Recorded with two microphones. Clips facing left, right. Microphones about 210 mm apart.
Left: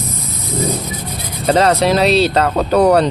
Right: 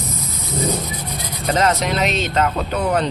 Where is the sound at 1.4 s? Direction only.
35° left (ahead or behind).